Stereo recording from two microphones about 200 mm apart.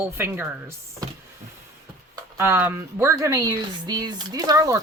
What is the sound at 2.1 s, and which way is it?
Speech, 10° right (ahead or behind).